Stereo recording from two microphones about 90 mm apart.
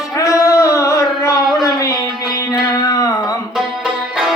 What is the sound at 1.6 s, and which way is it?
Music, 35° left (ahead or behind).